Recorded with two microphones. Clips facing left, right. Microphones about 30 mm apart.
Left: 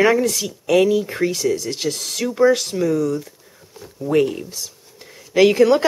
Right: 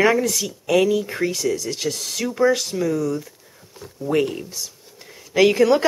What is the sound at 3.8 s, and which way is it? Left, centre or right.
Speech, centre.